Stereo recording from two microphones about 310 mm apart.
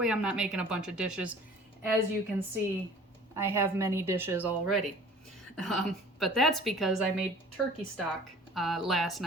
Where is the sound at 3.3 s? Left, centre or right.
Centre.